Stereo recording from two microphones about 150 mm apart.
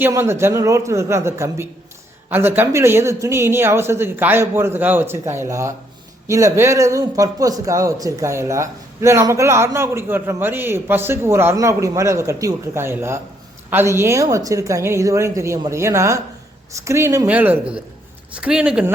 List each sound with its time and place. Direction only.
0.0 s a man's voice: 15° right (ahead or behind)